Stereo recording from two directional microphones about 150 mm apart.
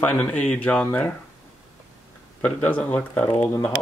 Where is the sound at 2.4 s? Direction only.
10° left (ahead or behind).